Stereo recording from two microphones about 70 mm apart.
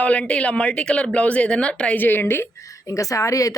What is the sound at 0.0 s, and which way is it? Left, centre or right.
Speech, centre.